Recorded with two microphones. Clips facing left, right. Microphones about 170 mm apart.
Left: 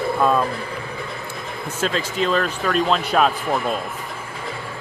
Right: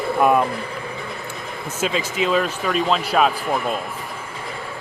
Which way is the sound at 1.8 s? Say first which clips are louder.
Even; 5° right (ahead or behind).